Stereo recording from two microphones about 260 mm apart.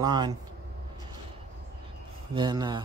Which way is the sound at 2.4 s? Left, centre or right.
Centre.